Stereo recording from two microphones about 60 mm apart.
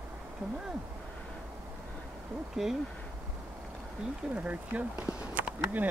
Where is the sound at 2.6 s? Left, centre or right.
Centre.